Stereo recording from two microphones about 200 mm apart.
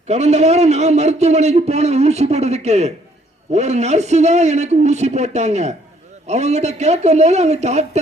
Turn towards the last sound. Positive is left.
turn(degrees=-35)  # may be behind; listen again after turning